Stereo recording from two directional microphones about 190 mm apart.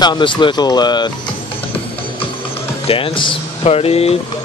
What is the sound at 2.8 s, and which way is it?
Speech, 30° left (ahead or behind).